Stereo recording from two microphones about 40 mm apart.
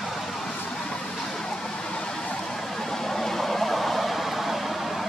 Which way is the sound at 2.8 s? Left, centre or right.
Centre.